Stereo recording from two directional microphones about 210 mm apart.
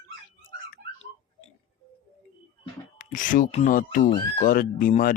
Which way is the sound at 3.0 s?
40° left (ahead or behind).